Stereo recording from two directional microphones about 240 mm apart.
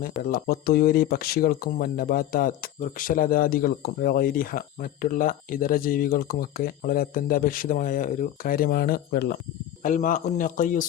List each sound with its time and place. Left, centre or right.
0.3 s speech: left